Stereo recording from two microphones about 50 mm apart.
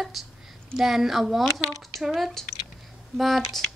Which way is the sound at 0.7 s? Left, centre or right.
Centre.